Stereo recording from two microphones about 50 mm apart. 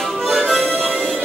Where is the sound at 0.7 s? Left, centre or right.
Left.